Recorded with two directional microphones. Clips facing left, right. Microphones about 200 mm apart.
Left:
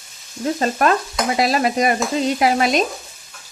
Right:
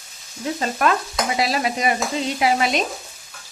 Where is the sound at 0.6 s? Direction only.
40° left (ahead or behind).